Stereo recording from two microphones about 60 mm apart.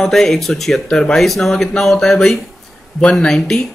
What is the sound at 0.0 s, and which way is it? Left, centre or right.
Speech, centre.